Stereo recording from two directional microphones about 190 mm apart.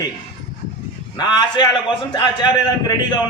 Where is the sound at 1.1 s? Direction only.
20° left (ahead or behind).